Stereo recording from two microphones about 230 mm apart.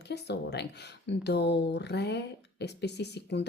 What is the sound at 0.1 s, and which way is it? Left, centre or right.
Speech, left.